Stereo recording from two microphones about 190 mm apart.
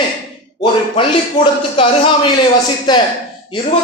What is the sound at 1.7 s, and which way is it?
A man's voice, 30° left (ahead or behind).